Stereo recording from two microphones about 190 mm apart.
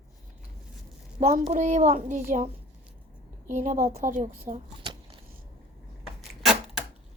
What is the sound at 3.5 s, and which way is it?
A child's voice, 40° right (ahead or behind).